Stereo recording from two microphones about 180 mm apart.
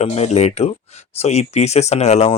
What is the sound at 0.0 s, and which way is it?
Speech, 35° left (ahead or behind).